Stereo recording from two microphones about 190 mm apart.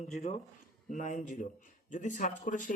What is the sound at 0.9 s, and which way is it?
Speech, 40° left (ahead or behind).